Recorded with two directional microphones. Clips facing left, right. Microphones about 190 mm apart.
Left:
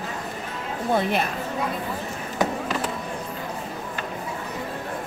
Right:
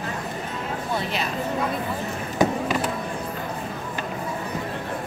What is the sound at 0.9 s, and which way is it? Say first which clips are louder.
Speech: left 6 dB; 55° left (ahead or behind).